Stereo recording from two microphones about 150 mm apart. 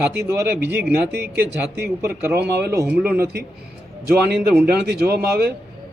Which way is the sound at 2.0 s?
90° right.